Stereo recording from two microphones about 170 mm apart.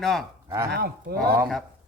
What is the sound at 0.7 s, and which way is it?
Speech, 65° right (ahead or behind).